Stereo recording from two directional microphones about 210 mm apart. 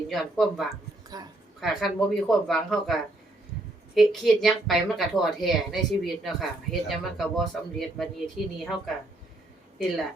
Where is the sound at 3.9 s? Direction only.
Centre (ahead or behind).